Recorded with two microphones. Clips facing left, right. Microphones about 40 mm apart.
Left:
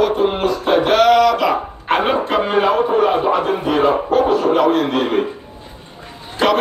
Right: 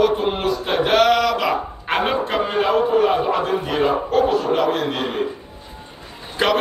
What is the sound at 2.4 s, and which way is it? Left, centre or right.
A man's voice, centre.